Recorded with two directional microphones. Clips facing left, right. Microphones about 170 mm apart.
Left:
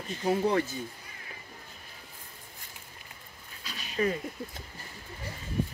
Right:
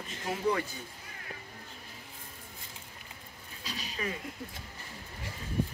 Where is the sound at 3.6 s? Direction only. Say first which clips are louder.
Right 3 dB; 35° right (ahead or behind).